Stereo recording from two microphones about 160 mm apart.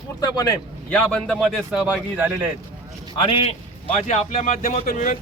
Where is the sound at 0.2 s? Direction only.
20° left (ahead or behind).